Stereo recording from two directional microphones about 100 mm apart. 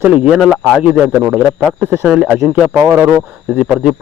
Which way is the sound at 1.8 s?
25° right (ahead or behind).